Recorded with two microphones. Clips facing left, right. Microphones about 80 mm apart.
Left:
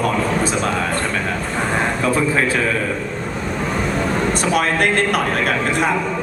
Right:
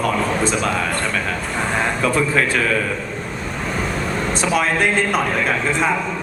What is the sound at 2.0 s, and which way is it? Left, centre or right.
Speech, left.